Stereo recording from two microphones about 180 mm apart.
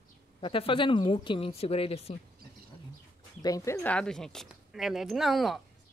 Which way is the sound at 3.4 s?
20° left (ahead or behind).